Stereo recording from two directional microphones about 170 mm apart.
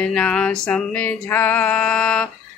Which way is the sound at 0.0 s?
5° left (ahead or behind).